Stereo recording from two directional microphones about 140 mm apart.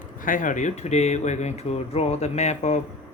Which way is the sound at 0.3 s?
70° left (ahead or behind).